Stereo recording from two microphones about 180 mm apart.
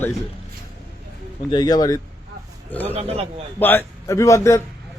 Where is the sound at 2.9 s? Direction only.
35° right (ahead or behind).